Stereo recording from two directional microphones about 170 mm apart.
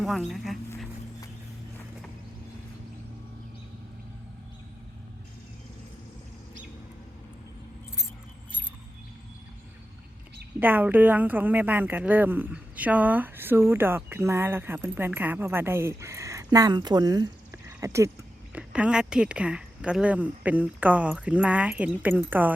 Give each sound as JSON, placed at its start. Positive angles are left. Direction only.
{"t": 0.0, "sound": "speech", "side_deg": 0}
{"t": 10.6, "sound": "a woman's voice", "side_deg": -10}
{"t": 18.5, "sound": "a woman's voice", "side_deg": -5}